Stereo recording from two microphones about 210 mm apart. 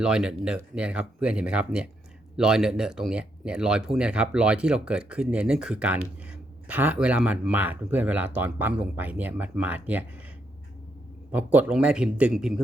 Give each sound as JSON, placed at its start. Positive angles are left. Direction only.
{"t": 0.0, "sound": "speech", "side_deg": -5}
{"t": 11.3, "sound": "speech", "side_deg": -5}